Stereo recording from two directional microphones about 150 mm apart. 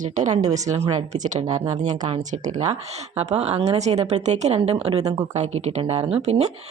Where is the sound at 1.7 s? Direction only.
55° right (ahead or behind).